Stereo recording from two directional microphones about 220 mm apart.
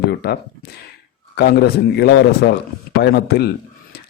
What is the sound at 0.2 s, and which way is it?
Speech, 45° left (ahead or behind).